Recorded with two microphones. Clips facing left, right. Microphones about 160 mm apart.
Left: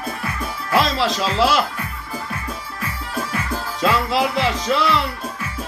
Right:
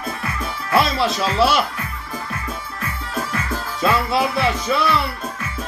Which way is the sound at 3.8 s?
5° right (ahead or behind).